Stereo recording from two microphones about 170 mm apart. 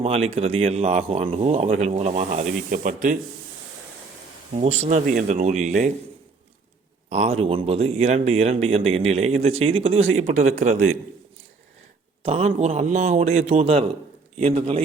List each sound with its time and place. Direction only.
0.0 s speech: 35° right (ahead or behind)
4.5 s speech: 40° right (ahead or behind)
7.1 s speech: 40° right (ahead or behind)
12.2 s speech: 40° right (ahead or behind)